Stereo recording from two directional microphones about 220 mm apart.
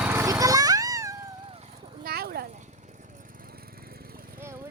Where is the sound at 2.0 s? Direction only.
45° right (ahead or behind).